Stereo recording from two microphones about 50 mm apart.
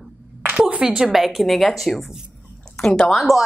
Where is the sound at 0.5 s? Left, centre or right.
Centre.